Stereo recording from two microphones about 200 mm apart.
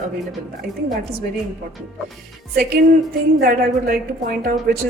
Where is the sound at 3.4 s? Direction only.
45° right (ahead or behind).